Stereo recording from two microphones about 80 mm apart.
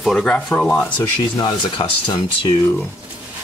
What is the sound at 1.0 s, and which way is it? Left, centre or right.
Speech, left.